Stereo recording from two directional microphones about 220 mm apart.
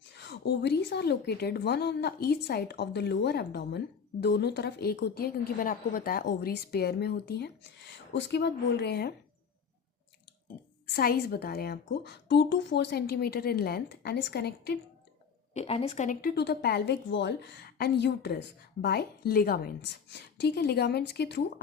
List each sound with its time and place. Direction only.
0.1 s a woman's voice: 50° left (ahead or behind)
10.8 s a woman's voice: 45° left (ahead or behind)
15.5 s a woman's voice: 25° left (ahead or behind); by 21.4 s 50° left (ahead or behind)